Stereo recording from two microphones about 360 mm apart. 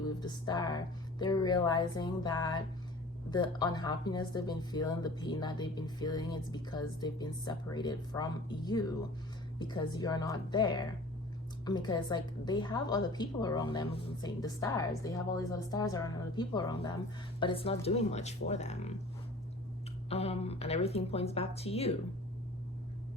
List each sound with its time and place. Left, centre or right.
0.2 s speech: centre
20.1 s speech: centre